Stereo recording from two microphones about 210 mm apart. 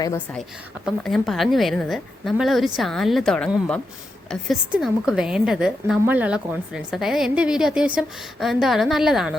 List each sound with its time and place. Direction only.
0.9 s a woman's voice: centre (ahead or behind)